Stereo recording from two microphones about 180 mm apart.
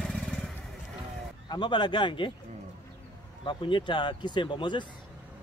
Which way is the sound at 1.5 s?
25° left (ahead or behind).